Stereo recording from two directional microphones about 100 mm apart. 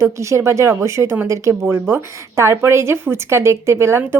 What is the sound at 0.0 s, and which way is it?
Speech, 30° right (ahead or behind).